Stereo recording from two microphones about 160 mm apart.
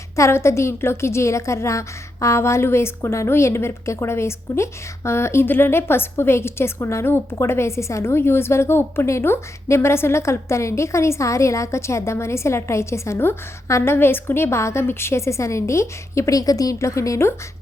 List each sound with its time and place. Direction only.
0.2 s a woman's voice: 15° left (ahead or behind)